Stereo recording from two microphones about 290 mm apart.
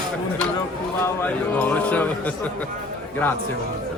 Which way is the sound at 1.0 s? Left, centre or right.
Centre.